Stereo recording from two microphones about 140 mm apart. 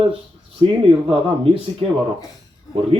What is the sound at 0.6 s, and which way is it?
Speech, 40° right (ahead or behind).